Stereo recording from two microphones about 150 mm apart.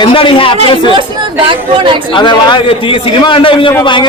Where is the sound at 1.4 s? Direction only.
35° right (ahead or behind).